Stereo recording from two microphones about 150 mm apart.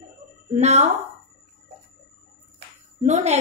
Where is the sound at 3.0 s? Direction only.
50° right (ahead or behind).